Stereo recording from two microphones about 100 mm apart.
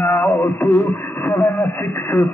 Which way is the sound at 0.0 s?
25° left (ahead or behind).